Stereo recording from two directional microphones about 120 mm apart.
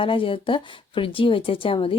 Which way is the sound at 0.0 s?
45° left (ahead or behind).